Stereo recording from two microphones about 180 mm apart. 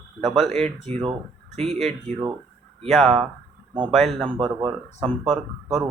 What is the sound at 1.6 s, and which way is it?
Speech, centre (ahead or behind).